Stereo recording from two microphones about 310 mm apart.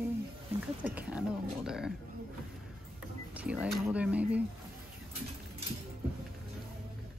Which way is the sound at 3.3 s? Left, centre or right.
Centre.